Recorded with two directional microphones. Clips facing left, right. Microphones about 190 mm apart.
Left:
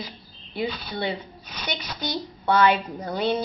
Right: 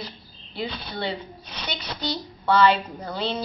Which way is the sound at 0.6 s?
10° left (ahead or behind).